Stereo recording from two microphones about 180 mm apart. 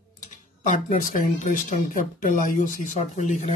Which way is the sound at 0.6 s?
50° left (ahead or behind).